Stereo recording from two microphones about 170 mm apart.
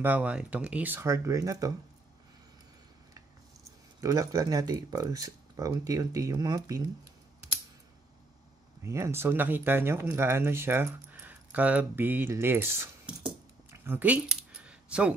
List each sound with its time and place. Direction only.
0.0 s speech: 10° right (ahead or behind)
3.2 s speech: 20° right (ahead or behind)
8.8 s speech: 15° right (ahead or behind)
13.7 s keys jangling: 10° right (ahead or behind)